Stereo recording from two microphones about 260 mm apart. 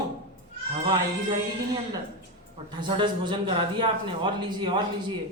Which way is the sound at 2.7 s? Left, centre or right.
Centre.